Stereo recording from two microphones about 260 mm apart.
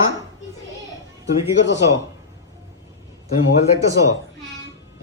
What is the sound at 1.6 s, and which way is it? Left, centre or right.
Speech, left.